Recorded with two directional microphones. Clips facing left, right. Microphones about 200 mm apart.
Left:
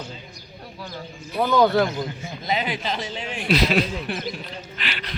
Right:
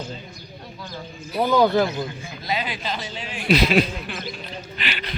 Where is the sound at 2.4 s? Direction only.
20° left (ahead or behind).